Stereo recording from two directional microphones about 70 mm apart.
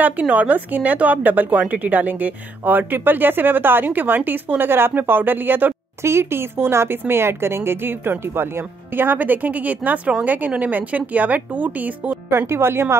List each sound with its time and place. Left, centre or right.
0.0 s speech: right
12.3 s speech: right